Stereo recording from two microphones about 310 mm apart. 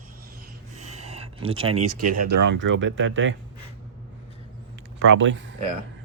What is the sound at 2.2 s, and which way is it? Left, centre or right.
Speech, right.